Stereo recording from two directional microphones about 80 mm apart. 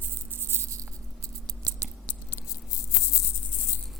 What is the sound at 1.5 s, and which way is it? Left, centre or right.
Scissors, right.